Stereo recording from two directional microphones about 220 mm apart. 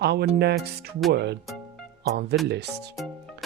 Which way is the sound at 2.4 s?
50° right (ahead or behind).